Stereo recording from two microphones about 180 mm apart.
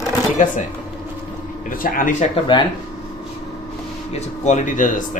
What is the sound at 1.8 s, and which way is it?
Speech, 50° left (ahead or behind).